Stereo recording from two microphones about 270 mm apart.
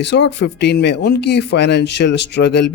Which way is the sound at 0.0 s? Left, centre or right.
Left.